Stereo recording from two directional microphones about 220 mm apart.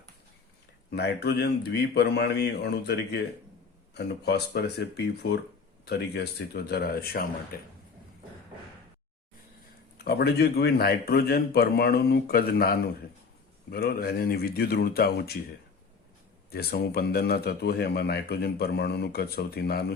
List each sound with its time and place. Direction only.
0.9 s a man's voice: 45° left (ahead or behind)
10.0 s a man's voice: 45° left (ahead or behind)
16.5 s a man's voice: 45° left (ahead or behind)